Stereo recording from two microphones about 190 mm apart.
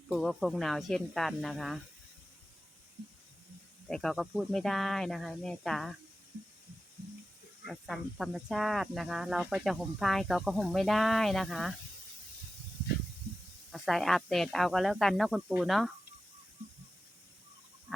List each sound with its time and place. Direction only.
0.2 s speech: centre (ahead or behind)
3.8 s speech: centre (ahead or behind)
7.7 s speech: centre (ahead or behind)
13.7 s speech: centre (ahead or behind)